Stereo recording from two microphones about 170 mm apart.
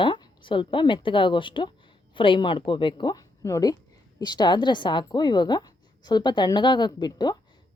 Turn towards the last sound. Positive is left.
turn(degrees=25)  # may be behind; listen again after turning